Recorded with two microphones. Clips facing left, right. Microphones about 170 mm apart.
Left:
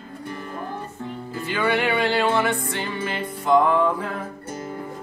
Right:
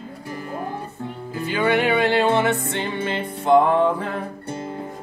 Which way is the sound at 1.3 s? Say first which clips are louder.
Right 3 dB; 15° right (ahead or behind).